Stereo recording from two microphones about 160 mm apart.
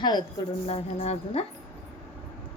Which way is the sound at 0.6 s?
40° left (ahead or behind).